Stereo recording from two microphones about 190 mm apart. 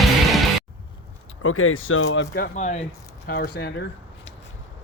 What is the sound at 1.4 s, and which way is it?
Speech, 90° left.